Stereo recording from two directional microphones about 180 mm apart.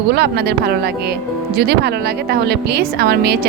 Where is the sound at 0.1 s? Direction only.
65° right (ahead or behind).